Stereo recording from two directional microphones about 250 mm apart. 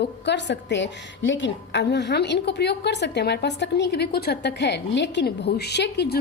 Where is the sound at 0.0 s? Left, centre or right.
Left.